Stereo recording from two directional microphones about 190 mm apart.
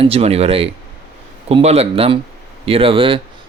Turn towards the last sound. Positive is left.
turn(degrees=-25)  # may be behind; listen again after turning